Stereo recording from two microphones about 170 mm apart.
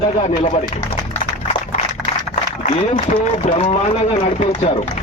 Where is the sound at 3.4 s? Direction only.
40° left (ahead or behind).